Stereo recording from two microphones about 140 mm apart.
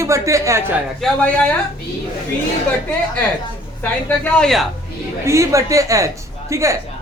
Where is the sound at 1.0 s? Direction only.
Centre (ahead or behind).